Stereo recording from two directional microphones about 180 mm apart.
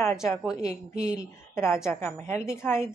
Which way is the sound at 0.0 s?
15° left (ahead or behind).